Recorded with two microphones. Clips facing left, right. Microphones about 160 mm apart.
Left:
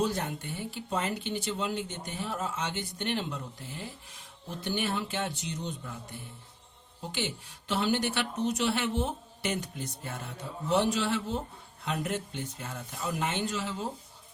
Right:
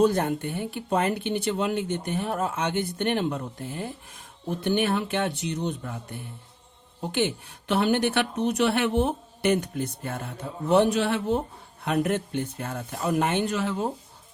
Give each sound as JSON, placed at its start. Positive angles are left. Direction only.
{"t": 0.0, "sound": "speech", "side_deg": -55}